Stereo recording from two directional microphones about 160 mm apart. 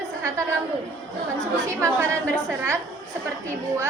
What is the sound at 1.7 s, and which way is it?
Speech, 15° right (ahead or behind).